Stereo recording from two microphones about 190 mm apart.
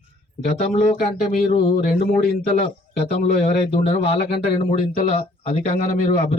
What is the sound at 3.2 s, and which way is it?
A man's voice, 35° left (ahead or behind).